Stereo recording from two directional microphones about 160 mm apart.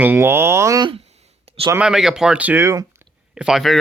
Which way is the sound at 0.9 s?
40° right (ahead or behind).